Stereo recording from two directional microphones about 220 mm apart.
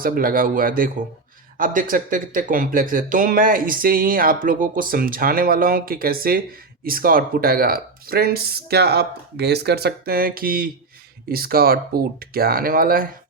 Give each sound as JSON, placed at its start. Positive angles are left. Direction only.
{"t": 0.0, "sound": "speech", "side_deg": -40}